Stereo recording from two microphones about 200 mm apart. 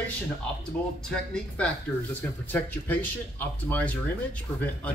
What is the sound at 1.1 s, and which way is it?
Speech, 5° left (ahead or behind).